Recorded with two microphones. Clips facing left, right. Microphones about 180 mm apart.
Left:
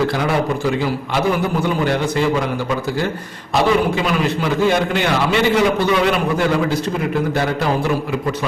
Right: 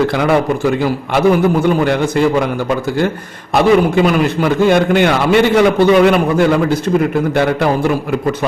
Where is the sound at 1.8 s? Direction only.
50° right (ahead or behind).